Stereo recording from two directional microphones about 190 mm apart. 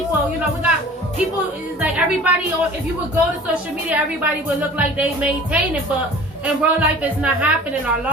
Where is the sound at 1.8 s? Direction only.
5° right (ahead or behind).